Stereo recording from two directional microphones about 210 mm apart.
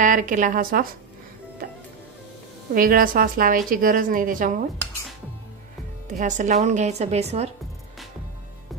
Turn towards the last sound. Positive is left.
turn(degrees=-30)  # may be behind; listen again after turning